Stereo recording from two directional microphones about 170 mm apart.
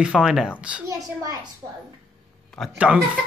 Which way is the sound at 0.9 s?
20° right (ahead or behind).